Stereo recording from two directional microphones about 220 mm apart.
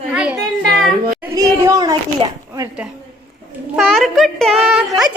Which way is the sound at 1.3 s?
15° right (ahead or behind).